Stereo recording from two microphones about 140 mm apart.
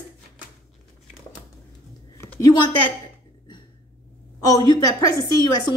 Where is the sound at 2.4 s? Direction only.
30° left (ahead or behind).